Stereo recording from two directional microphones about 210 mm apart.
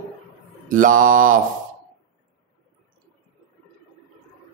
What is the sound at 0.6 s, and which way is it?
Mantra, 40° right (ahead or behind).